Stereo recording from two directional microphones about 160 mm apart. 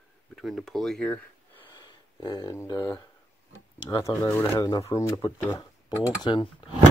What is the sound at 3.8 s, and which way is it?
Speech, 20° left (ahead or behind).